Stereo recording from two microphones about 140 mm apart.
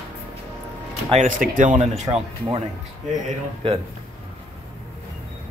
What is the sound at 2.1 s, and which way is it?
Speech, 30° right (ahead or behind).